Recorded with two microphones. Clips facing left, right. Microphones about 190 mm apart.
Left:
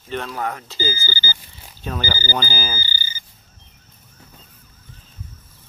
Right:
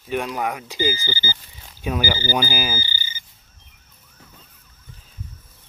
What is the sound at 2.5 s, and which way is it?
Speech, 10° right (ahead or behind).